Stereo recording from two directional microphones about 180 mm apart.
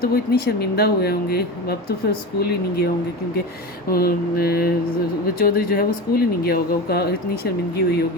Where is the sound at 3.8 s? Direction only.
55° left (ahead or behind).